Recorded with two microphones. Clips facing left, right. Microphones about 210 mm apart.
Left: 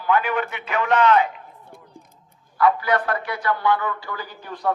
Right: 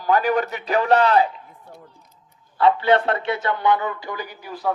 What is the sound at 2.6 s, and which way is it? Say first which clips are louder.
A man's voice: right 3 dB; 25° right (ahead or behind).